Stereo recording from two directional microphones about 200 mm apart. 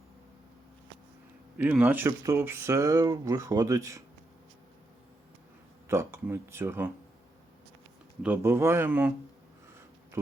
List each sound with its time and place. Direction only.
1.5 s speech: 10° right (ahead or behind)
5.9 s speech: 15° right (ahead or behind)
8.2 s speech: 10° right (ahead or behind)